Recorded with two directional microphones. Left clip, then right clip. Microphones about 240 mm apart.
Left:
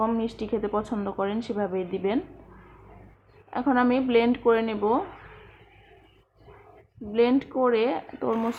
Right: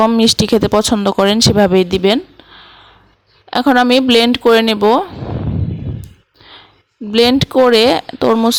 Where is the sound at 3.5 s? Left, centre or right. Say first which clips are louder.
Right 13 dB; right.